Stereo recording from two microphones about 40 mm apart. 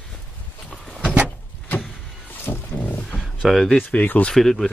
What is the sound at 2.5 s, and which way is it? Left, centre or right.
Wild animals, left.